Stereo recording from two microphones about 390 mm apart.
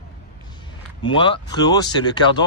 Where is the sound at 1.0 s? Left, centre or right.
Centre.